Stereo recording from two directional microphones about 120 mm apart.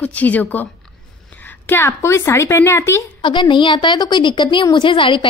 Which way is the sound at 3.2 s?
40° left (ahead or behind).